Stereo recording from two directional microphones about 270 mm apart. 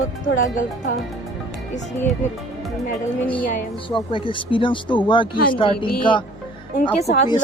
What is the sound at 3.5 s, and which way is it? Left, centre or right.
Speech, left.